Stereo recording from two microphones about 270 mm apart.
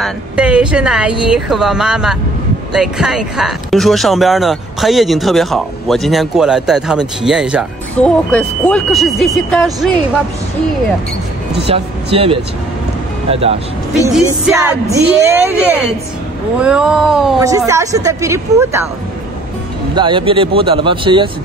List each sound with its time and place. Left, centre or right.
0.0 s speech: centre
11.6 s speech: right
14.0 s speech: centre
17.4 s speech: centre
20.0 s speech: centre